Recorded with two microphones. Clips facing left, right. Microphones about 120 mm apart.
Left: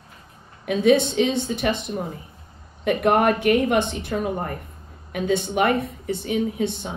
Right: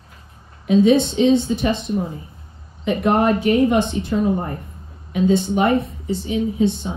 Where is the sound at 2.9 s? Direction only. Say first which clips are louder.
Right 1 dB; 60° left (ahead or behind).